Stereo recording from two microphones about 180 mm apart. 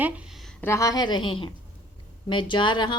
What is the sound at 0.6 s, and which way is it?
A woman's voice, 15° left (ahead or behind).